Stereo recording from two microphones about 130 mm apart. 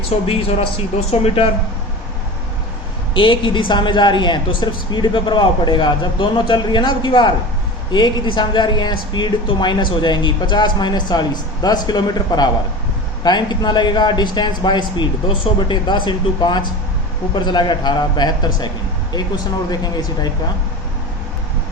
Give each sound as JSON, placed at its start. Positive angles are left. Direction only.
{"t": 0.3, "sound": "speech", "side_deg": 45}
{"t": 3.2, "sound": "a woman's voice", "side_deg": 40}